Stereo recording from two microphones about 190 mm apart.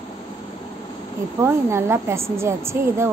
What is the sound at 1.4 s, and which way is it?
A woman's voice, 15° right (ahead or behind).